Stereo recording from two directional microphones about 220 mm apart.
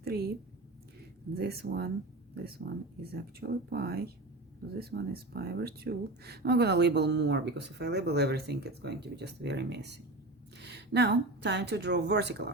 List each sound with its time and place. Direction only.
0.0 s a woman's voice: 45° right (ahead or behind)
1.4 s speech: 45° right (ahead or behind)
3.0 s a woman's voice: 45° right (ahead or behind)